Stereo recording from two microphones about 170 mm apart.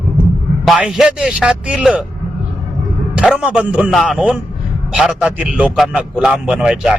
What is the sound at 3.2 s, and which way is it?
Speech, 5° right (ahead or behind).